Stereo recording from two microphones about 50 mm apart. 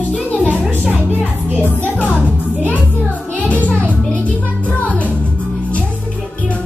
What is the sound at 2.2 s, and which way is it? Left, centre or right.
Music, left.